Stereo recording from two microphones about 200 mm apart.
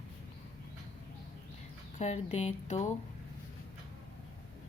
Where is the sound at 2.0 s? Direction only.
35° left (ahead or behind).